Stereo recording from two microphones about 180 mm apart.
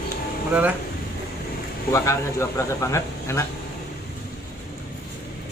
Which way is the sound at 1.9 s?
15° left (ahead or behind).